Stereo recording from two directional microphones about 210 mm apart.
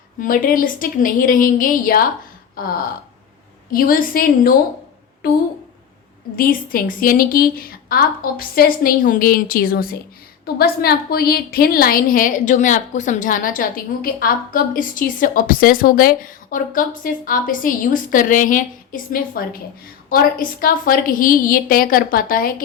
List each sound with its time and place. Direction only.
0.2 s a woman's voice: 40° left (ahead or behind)
6.3 s a woman's voice: 45° left (ahead or behind)